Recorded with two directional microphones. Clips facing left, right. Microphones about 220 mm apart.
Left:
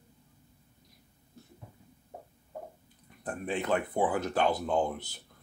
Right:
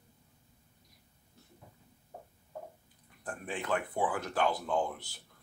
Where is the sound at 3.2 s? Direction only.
20° left (ahead or behind).